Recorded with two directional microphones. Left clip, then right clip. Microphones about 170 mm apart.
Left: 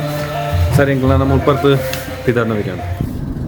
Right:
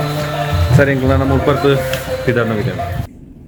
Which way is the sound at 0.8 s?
20° left (ahead or behind).